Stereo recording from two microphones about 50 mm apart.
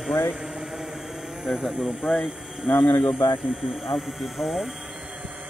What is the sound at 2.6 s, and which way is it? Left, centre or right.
Speech, left.